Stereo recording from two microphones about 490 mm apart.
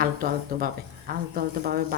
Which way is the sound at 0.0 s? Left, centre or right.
Centre.